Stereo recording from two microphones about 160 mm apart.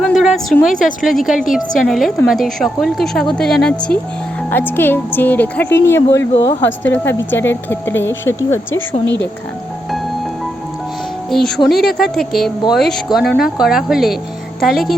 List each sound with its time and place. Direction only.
0.0 s a sound: centre (ahead or behind)
0.7 s speech: 55° left (ahead or behind)
1.0 s a woman's voice: centre (ahead or behind); by 9.0 s 15° left (ahead or behind)
11.3 s a woman's voice: 5° left (ahead or behind)